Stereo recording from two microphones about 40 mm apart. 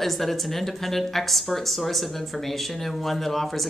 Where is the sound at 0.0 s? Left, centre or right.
Centre.